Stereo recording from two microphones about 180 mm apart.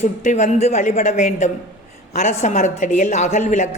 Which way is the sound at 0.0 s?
40° left (ahead or behind).